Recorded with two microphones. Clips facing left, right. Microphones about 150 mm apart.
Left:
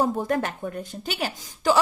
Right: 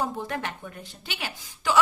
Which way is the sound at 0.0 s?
40° left (ahead or behind).